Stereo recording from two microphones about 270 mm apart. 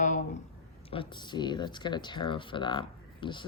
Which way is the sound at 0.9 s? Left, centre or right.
Centre.